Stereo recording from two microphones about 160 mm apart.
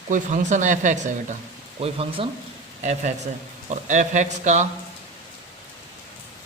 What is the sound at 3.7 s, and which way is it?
Speech, 50° right (ahead or behind).